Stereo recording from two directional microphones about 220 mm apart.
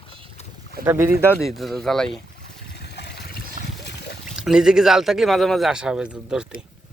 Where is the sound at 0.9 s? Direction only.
10° right (ahead or behind).